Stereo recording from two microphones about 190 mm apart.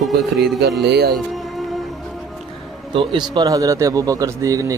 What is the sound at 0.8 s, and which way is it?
Speech, 55° right (ahead or behind).